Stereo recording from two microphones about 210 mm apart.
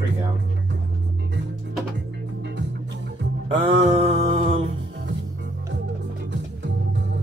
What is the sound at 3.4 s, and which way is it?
Mantra, 25° right (ahead or behind).